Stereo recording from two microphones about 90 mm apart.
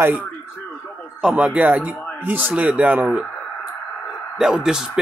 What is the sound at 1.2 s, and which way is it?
Speech, 10° right (ahead or behind).